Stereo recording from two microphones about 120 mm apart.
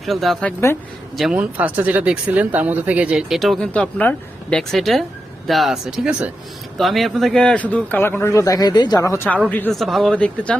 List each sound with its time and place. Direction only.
0.0 s speech: centre (ahead or behind)
1.4 s speech: 15° right (ahead or behind)
3.7 s a man's voice: 10° left (ahead or behind)
9.7 s speech: centre (ahead or behind)